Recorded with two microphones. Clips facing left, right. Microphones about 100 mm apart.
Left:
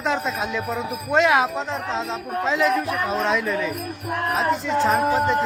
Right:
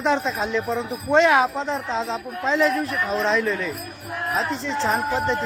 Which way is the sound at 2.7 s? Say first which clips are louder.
Left 2 dB; 55° left (ahead or behind).